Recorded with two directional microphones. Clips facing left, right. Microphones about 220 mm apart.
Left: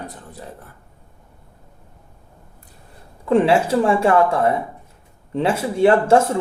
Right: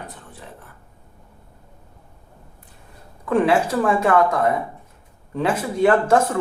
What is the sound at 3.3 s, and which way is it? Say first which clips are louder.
Speech: left 2 dB; 25° left (ahead or behind).